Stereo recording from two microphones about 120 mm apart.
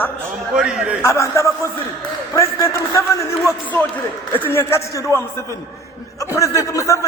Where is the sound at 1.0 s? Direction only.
25° left (ahead or behind).